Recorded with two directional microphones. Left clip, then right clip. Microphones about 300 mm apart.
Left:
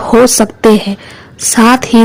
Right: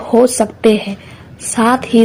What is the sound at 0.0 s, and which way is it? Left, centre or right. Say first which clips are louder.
A woman's voice: left 4 dB; left.